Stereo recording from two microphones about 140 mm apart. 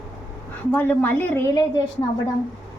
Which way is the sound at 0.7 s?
15° left (ahead or behind).